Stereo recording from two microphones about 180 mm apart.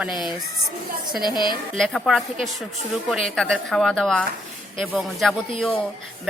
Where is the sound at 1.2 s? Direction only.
25° left (ahead or behind).